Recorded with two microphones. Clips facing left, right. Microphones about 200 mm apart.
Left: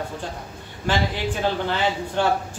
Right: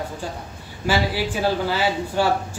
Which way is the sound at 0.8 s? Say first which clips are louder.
Right 2 dB; 10° right (ahead or behind).